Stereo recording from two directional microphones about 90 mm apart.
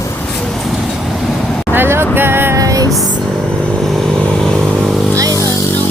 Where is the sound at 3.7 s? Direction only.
5° left (ahead or behind).